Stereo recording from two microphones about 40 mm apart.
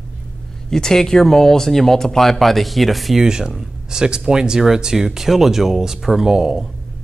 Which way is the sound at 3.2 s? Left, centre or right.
Centre.